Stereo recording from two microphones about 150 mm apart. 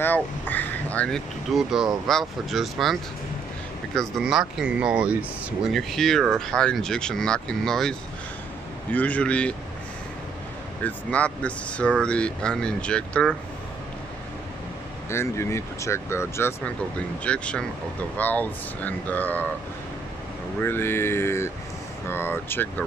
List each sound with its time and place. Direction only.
0.0 s speech: 10° left (ahead or behind)
8.9 s speech: 10° left (ahead or behind)
10.8 s speech: 10° left (ahead or behind)
15.0 s speech: 20° left (ahead or behind)
20.6 s speech: 15° left (ahead or behind)